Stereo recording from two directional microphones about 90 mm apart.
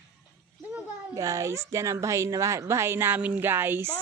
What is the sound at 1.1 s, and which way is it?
A woman's voice, 35° right (ahead or behind).